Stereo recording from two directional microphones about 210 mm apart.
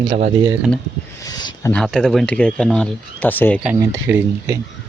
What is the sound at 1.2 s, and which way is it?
Speech, 20° left (ahead or behind).